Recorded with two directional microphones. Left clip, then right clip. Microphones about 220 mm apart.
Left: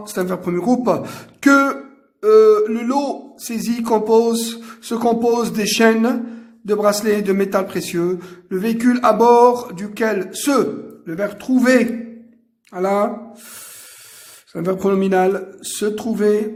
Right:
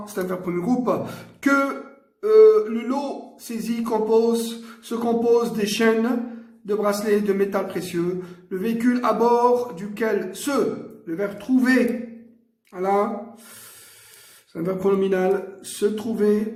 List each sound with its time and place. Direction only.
0.0 s a man's voice: 50° left (ahead or behind)
14.5 s a man's voice: 45° left (ahead or behind)